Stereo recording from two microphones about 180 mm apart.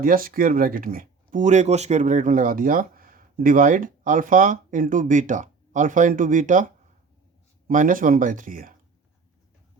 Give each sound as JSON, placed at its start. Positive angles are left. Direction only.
{"t": 0.0, "sound": "speech", "side_deg": -50}
{"t": 7.7, "sound": "speech", "side_deg": -45}